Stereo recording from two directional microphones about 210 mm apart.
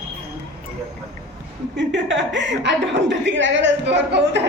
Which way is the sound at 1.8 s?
60° right (ahead or behind).